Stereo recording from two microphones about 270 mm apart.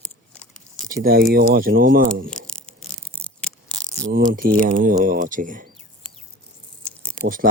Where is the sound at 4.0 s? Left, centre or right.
Right.